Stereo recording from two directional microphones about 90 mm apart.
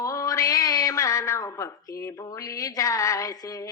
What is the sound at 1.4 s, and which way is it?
Speech, 40° left (ahead or behind).